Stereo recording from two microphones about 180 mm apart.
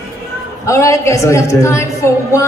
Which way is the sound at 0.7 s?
15° left (ahead or behind).